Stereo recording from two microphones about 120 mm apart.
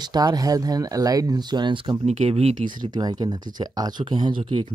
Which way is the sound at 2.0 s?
60° right (ahead or behind).